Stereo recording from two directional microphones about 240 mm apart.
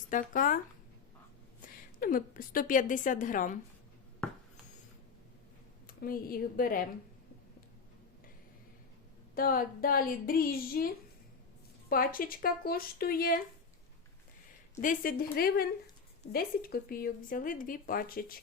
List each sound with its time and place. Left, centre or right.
0.1 s speech: left
1.6 s a woman's voice: left
5.9 s speech: left
9.3 s speech: left
11.9 s speech: left
14.8 s speech: left